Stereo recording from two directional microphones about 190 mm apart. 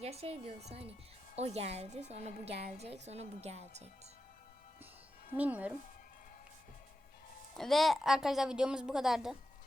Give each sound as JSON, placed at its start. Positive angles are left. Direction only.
{"t": 0.0, "sound": "a woman's voice", "side_deg": -35}
{"t": 5.3, "sound": "speech", "side_deg": -10}
{"t": 7.5, "sound": "a woman's voice", "side_deg": 0}